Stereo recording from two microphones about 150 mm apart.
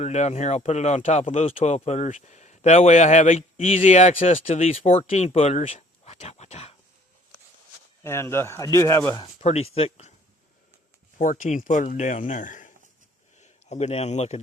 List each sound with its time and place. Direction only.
0.0 s speech: 50° left (ahead or behind)
8.0 s speech: 15° left (ahead or behind)
9.4 s speech: 45° left (ahead or behind)
11.2 s speech: 60° left (ahead or behind)
13.4 s a man's voice: 50° left (ahead or behind)